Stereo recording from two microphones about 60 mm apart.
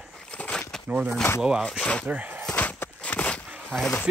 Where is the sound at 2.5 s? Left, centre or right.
Left.